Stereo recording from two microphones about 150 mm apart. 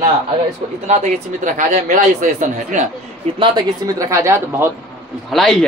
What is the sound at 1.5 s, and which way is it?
A man's voice, 60° right (ahead or behind).